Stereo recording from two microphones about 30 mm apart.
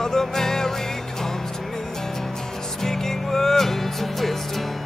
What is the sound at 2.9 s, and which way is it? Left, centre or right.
Music, centre.